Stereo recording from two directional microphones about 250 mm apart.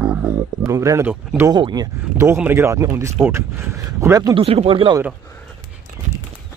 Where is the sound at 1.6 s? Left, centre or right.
Centre.